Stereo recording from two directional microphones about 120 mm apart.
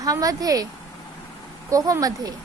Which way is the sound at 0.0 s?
30° right (ahead or behind).